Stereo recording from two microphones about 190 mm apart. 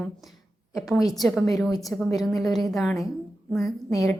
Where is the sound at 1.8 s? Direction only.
Centre (ahead or behind).